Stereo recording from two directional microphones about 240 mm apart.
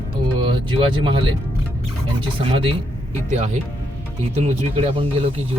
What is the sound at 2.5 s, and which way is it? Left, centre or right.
Speech, right.